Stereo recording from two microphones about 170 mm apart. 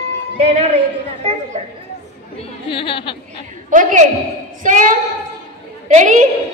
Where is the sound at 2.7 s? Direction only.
30° left (ahead or behind).